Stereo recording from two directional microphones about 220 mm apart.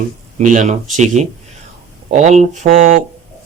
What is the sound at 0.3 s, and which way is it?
Speech, 35° right (ahead or behind).